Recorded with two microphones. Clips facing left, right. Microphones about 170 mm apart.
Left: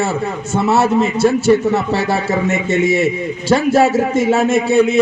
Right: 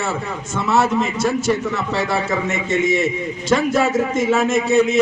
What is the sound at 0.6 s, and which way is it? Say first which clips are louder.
Speech: left 3 dB; 30° left (ahead or behind).